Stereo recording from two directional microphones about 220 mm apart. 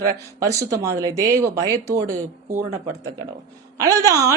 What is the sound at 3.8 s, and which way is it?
Speech, 15° right (ahead or behind).